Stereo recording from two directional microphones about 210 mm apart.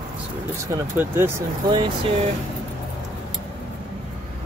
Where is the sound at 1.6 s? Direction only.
25° right (ahead or behind).